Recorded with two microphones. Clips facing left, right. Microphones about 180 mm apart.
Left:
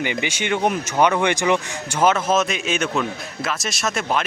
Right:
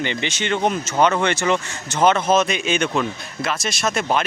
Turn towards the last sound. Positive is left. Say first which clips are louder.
# right 2 dB
turn(degrees=0)  # may be behind; listen again after turning